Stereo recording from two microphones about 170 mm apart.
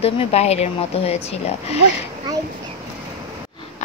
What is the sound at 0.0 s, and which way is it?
A woman's voice, 35° left (ahead or behind).